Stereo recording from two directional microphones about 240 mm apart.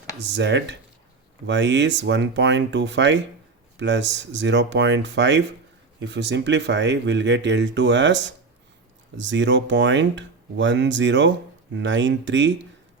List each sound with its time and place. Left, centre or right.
0.2 s speech: right